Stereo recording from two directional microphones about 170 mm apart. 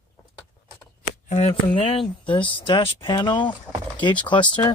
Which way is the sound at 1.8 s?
30° left (ahead or behind).